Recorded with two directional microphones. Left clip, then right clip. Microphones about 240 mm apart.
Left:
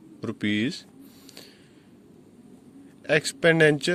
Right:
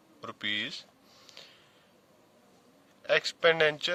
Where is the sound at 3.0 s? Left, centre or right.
Centre.